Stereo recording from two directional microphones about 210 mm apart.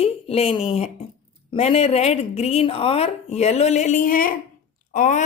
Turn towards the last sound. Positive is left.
turn(degrees=35)  # may be behind; listen again after turning